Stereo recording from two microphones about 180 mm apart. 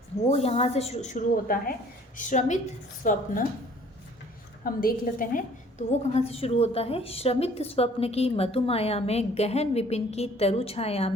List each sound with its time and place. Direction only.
0.3 s a woman's voice: 35° left (ahead or behind)
4.6 s a woman's voice: 55° left (ahead or behind)
5.9 s a woman's voice: 35° left (ahead or behind)